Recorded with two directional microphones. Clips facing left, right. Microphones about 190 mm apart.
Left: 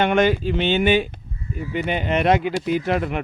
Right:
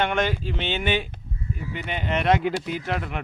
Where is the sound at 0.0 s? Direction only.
10° left (ahead or behind).